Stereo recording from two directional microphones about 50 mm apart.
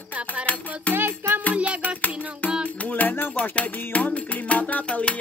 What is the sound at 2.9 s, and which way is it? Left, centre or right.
Music, left.